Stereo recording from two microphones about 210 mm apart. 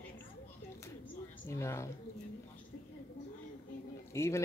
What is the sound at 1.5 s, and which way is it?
Speech, 15° left (ahead or behind).